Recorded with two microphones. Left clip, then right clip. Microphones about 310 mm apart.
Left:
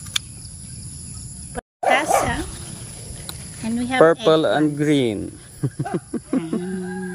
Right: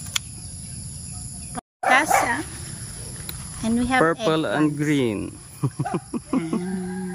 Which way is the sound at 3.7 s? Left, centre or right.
Centre.